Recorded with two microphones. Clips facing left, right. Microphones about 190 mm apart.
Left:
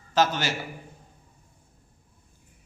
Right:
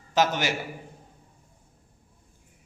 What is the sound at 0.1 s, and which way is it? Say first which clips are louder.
Speech: even; 15° right (ahead or behind).